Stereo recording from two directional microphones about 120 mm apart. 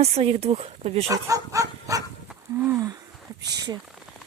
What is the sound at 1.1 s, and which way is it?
Bow-wow, 25° right (ahead or behind).